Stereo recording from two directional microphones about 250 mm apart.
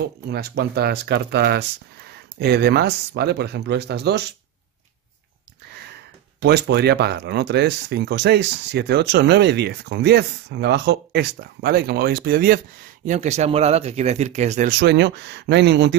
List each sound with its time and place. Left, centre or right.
0.0 s speech: right
6.4 s speech: right